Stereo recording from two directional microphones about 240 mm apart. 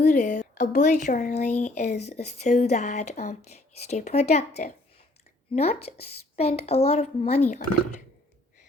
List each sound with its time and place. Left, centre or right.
0.0 s a woman's voice: left